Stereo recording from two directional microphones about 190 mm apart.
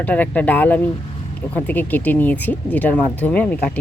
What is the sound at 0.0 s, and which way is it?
Speech, 10° left (ahead or behind).